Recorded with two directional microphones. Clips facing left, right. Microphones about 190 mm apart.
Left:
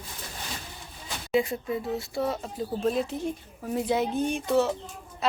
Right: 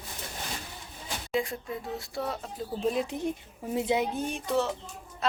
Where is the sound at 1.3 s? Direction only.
5° left (ahead or behind).